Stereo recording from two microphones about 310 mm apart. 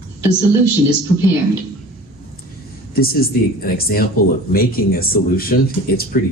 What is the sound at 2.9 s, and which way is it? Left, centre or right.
Speech, left.